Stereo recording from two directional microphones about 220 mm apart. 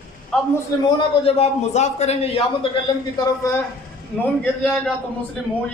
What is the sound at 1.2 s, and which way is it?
A man's voice, 30° left (ahead or behind).